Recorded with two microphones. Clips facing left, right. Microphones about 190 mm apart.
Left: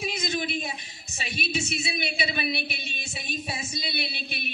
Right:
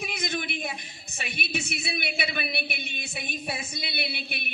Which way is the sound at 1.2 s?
55° right (ahead or behind).